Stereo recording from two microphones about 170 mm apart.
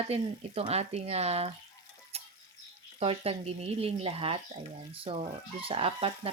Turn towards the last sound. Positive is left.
turn(degrees=-35)  # may be behind; listen again after turning